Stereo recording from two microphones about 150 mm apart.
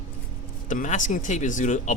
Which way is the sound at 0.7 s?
55° left (ahead or behind).